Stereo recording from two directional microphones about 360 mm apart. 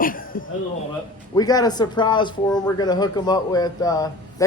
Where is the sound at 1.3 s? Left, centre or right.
Centre.